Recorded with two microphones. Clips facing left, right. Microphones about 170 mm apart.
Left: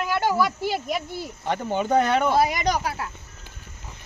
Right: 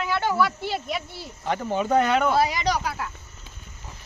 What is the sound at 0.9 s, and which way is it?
Speech, 45° left (ahead or behind).